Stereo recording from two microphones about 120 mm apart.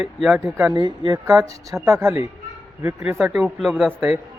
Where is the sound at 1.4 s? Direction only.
25° right (ahead or behind).